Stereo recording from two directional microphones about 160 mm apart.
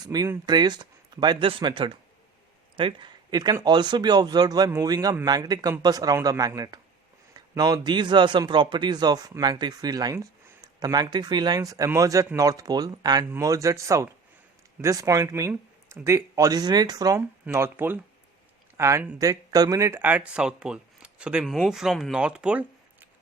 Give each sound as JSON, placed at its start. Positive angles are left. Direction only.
{"t": 0.0, "sound": "a man's voice", "side_deg": -25}